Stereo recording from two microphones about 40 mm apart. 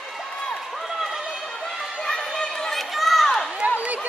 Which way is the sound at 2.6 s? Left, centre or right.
Centre.